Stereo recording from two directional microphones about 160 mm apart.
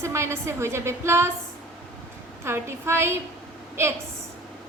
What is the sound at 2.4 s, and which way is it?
Speech, 15° right (ahead or behind).